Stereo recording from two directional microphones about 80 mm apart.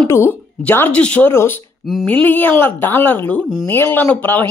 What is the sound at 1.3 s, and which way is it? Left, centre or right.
Speech, left.